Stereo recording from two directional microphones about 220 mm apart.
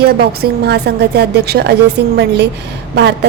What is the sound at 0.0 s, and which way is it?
A woman's voice, 45° right (ahead or behind).